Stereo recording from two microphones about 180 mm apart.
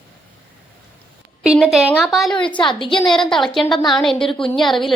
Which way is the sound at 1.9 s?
10° left (ahead or behind).